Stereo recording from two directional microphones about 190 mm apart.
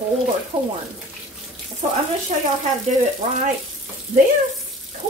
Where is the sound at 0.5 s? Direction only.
25° right (ahead or behind).